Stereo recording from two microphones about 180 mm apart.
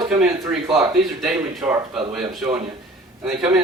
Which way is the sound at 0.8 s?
Centre (ahead or behind).